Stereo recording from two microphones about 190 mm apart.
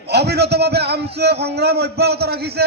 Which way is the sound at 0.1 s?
60° right (ahead or behind).